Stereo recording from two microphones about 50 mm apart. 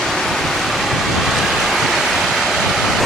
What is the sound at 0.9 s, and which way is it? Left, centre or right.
Waves, centre.